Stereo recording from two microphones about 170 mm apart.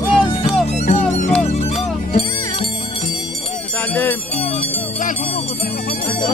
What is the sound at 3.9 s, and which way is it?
Jingle bell, 10° left (ahead or behind).